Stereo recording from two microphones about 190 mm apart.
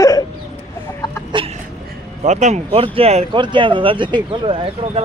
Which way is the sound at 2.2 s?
40° right (ahead or behind).